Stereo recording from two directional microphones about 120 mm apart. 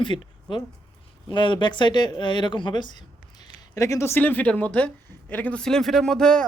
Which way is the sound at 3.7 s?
25° left (ahead or behind).